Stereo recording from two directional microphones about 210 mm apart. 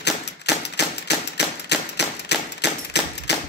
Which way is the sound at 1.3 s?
55° left (ahead or behind).